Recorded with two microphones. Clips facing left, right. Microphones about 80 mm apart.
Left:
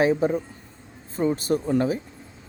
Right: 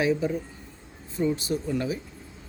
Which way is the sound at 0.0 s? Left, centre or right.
Left.